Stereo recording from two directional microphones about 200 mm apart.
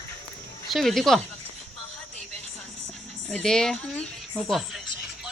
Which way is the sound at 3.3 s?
5° left (ahead or behind).